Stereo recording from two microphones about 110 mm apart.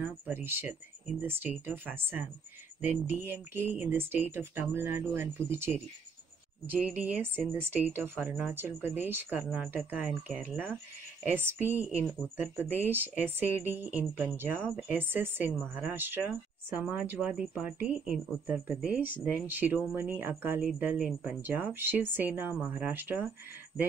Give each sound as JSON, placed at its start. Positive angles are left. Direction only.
{"t": 0.0, "sound": "speech", "side_deg": -20}
{"t": 14.5, "sound": "speech", "side_deg": 10}
{"t": 14.8, "sound": "speech", "side_deg": -20}